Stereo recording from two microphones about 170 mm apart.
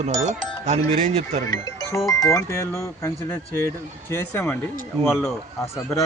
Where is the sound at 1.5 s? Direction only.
20° left (ahead or behind).